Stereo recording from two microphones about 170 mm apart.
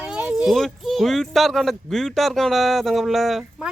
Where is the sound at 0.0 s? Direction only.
5° right (ahead or behind).